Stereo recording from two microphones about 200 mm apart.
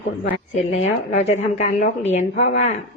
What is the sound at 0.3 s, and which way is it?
A woman's voice, 30° left (ahead or behind).